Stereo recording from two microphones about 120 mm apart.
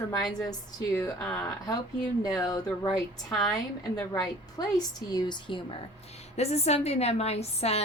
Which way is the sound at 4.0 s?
30° left (ahead or behind).